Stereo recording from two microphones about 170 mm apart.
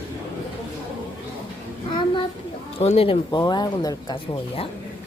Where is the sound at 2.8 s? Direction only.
35° left (ahead or behind).